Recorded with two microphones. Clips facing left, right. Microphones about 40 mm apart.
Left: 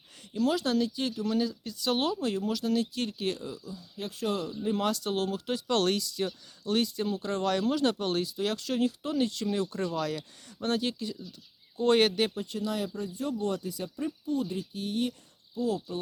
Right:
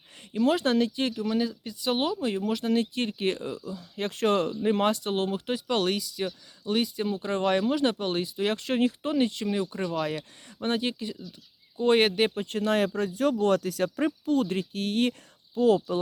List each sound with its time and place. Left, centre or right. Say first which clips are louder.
0.3 s speech: right 4 dB; right
1.2 s speech: right 2 dB; right
2.5 s speech: right 3 dB; right
3.7 s speech: right 6 dB; right
4.9 s speech: right 3 dB; right
5.5 s speech: left 1 dB; centre
12.3 s speech: right 6 dB; right
13.0 s speech: right 8 dB; right
13.4 s speech: right 8 dB; right
15.5 s speech: right 8 dB; right